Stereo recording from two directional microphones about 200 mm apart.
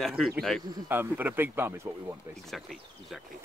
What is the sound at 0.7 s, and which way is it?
Speech, 10° right (ahead or behind).